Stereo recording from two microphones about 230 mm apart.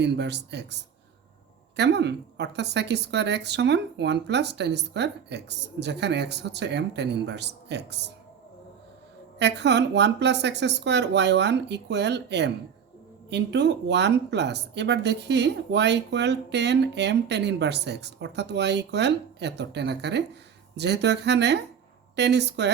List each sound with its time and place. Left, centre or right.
0.0 s speech: right
9.4 s speech: right